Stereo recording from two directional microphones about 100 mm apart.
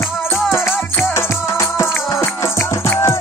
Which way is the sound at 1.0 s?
30° left (ahead or behind).